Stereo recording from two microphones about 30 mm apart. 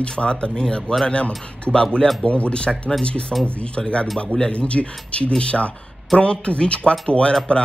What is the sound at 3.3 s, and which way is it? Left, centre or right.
Speech, centre.